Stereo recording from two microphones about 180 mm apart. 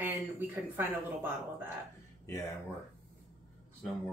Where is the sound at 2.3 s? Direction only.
15° left (ahead or behind).